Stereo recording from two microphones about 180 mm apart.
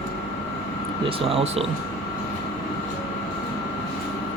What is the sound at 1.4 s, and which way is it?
Speech, 35° right (ahead or behind).